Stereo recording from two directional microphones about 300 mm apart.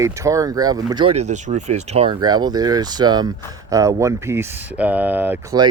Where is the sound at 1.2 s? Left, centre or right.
Right; by 5.6 s centre.